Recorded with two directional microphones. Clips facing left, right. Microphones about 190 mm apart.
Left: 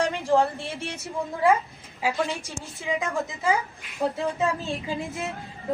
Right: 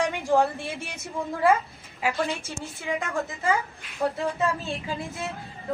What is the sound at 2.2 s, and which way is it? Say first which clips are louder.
A woman's voice: right 1 dB; 15° left (ahead or behind).